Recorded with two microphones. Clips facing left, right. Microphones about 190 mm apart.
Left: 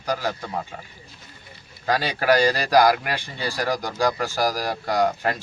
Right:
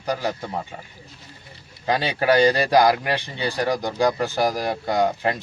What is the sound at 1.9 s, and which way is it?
Speech, 20° right (ahead or behind).